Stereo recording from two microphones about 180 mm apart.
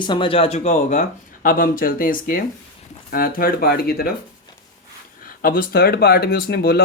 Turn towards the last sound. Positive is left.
turn(degrees=60)  # may be behind; listen again after turning